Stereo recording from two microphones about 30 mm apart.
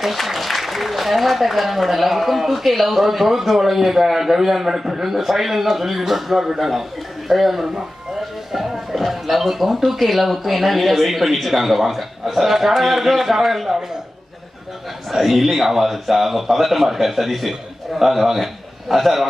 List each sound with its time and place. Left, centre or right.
0.0 s speech: centre
15.1 s speech: centre